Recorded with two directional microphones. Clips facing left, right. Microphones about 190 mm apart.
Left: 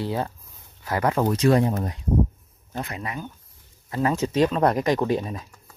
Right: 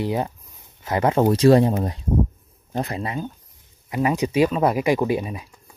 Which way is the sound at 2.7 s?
35° right (ahead or behind).